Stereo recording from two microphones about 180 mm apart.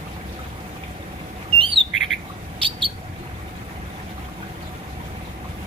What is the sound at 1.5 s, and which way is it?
Bird, 30° right (ahead or behind).